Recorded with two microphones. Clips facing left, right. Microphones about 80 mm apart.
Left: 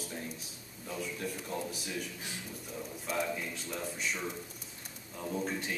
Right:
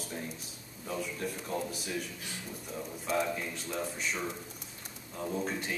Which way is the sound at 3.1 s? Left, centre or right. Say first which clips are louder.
Right 3 dB; centre.